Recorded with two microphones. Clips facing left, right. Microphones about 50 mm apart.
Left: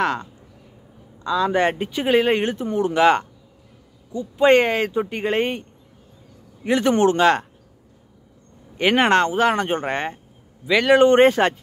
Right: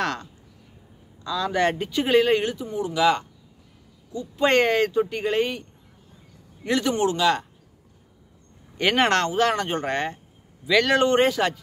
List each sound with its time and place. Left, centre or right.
0.0 s speech: left
4.4 s speech: centre; by 5.7 s left
6.7 s speech: left
8.7 s speech: left
11.1 s speech: left